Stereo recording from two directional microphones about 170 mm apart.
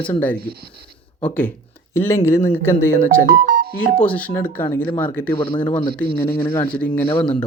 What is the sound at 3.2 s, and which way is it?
Music, 65° right (ahead or behind).